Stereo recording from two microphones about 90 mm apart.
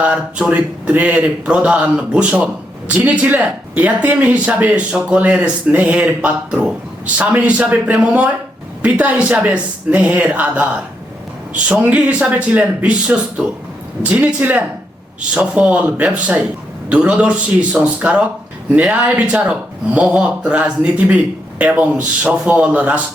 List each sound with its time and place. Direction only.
0.0 s speech: 15° right (ahead or behind)
11.7 s speech: 20° right (ahead or behind)